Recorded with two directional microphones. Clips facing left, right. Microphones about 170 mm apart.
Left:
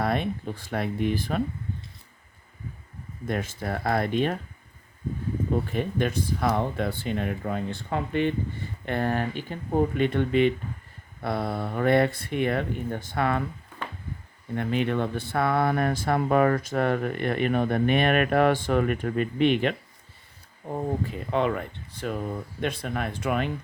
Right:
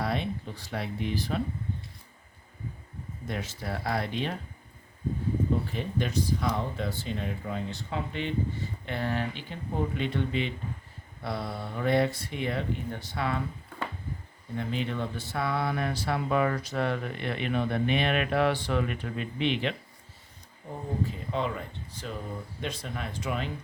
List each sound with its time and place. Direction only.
0.0 s speech: 55° left (ahead or behind)
3.2 s speech: 50° left (ahead or behind)
5.7 s speech: 55° left (ahead or behind)
14.5 s speech: 60° left (ahead or behind)